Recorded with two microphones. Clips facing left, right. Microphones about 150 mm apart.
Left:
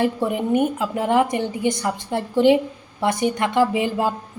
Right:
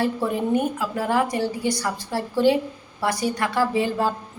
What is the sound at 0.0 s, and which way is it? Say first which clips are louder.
A woman's voice: left 2 dB; 20° left (ahead or behind).